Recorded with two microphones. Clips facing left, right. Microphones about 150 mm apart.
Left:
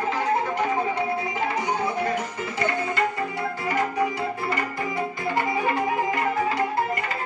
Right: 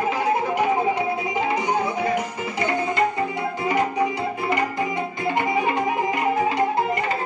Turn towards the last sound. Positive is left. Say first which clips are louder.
# right 3 dB
turn(degrees=-20)  # may be behind; listen again after turning